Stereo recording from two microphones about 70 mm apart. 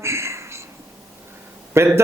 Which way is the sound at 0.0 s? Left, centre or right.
Right.